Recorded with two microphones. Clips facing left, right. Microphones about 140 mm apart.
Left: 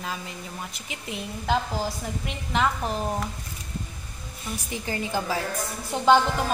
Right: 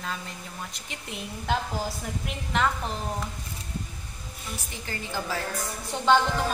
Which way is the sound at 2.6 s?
5° left (ahead or behind).